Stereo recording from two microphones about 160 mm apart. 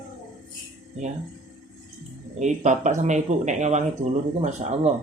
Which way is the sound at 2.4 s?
50° right (ahead or behind).